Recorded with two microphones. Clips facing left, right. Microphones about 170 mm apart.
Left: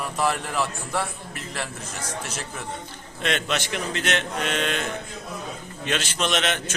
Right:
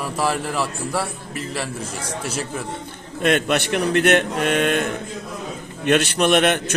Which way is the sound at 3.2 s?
55° right (ahead or behind).